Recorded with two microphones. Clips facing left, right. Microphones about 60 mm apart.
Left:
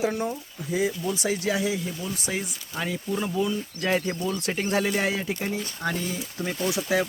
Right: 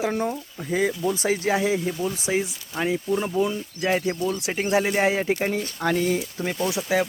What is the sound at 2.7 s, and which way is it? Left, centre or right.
Speech, right.